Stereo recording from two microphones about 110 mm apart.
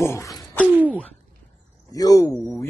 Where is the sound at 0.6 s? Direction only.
15° right (ahead or behind).